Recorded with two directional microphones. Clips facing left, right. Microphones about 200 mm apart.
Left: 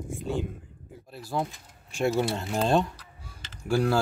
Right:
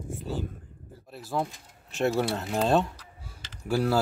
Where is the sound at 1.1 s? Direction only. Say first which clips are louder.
Even; centre (ahead or behind).